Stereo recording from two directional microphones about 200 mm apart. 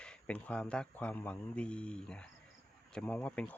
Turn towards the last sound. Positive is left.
turn(degrees=10)  # may be behind; listen again after turning